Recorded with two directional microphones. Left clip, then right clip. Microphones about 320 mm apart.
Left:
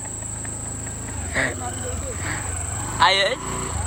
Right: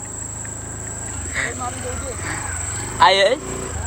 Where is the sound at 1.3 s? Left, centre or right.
Centre.